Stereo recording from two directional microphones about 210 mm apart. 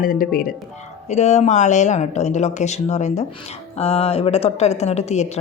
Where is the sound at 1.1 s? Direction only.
30° left (ahead or behind).